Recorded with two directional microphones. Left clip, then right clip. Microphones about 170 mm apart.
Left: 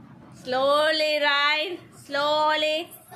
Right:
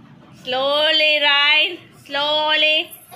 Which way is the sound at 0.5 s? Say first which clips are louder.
Right 4 dB; 15° left (ahead or behind).